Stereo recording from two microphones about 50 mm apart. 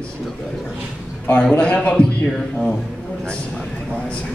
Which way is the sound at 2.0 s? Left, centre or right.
Left.